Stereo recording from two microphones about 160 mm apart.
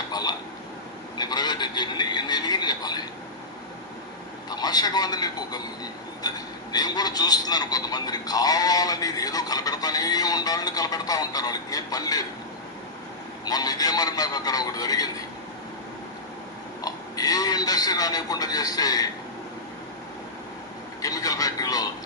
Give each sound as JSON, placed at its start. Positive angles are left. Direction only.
{"t": 0.1, "sound": "a sound", "side_deg": 25}
{"t": 1.2, "sound": "a man's voice", "side_deg": 25}
{"t": 4.4, "sound": "a man's voice", "side_deg": 25}
{"t": 13.4, "sound": "a man's voice", "side_deg": 25}
{"t": 16.8, "sound": "a man's voice", "side_deg": 25}
{"t": 21.0, "sound": "a sound", "side_deg": 20}